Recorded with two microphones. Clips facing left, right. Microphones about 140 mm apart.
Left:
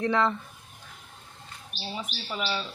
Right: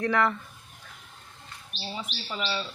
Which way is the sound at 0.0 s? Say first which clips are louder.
Even; 20° left (ahead or behind).